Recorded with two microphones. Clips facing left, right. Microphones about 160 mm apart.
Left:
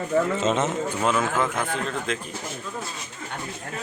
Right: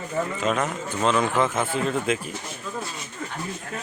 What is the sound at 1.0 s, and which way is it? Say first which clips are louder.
Speech: right 3 dB; 5° left (ahead or behind).